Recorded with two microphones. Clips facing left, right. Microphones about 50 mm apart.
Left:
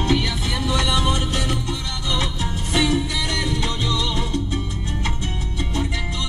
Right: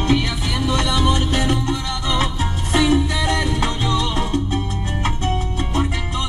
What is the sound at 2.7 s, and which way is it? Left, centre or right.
Music, right.